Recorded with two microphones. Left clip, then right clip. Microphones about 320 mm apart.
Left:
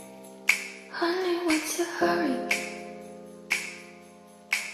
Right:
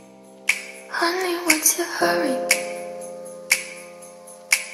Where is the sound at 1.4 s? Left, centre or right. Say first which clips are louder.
Right 6 dB; right.